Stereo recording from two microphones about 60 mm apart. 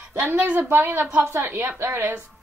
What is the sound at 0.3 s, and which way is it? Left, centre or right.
A woman's voice, right.